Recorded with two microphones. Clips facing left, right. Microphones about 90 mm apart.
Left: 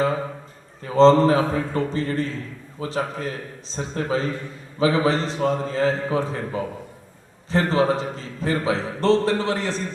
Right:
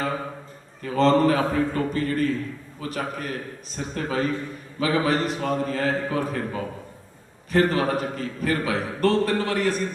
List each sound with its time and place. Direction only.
0.8 s a man's voice: 25° left (ahead or behind)